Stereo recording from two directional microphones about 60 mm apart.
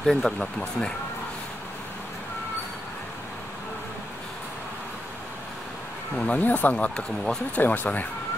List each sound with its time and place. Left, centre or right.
0.0 s speech: centre
6.1 s speech: left